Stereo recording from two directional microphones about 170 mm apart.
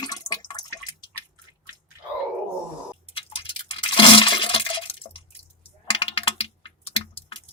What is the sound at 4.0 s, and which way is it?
Toilet flush, 30° left (ahead or behind).